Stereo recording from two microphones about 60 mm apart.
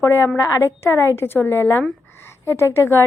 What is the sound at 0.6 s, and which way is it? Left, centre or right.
A woman's voice, left.